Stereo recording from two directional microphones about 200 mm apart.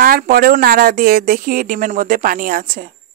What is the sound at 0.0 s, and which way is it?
Speech, 50° right (ahead or behind).